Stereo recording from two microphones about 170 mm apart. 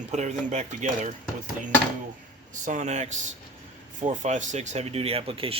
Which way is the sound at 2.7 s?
45° right (ahead or behind).